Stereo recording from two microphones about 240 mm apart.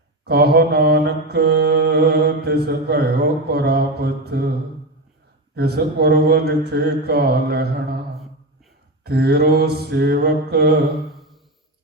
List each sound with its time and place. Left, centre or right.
0.3 s mantra: right
5.5 s mantra: right
9.0 s mantra: right